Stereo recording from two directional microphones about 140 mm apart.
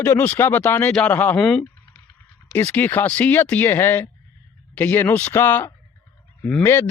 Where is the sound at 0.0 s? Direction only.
15° left (ahead or behind).